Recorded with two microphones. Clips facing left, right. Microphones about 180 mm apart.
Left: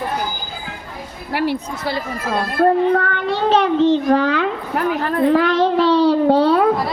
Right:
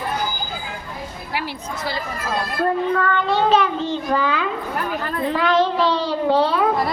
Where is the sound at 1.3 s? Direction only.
60° left (ahead or behind).